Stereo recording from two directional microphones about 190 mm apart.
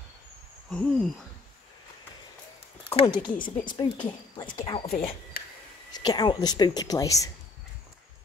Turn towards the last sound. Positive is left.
turn(degrees=15)  # may be behind; listen again after turning